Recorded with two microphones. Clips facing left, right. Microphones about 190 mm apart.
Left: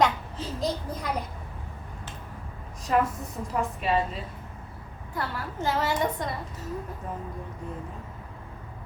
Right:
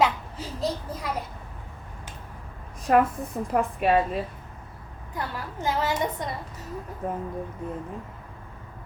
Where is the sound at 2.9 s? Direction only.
55° right (ahead or behind).